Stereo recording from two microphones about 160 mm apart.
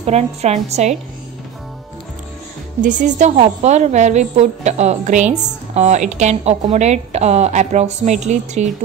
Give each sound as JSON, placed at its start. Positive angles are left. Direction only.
{"t": 0.0, "sound": "a woman's voice", "side_deg": -40}
{"t": 2.8, "sound": "a woman's voice", "side_deg": -50}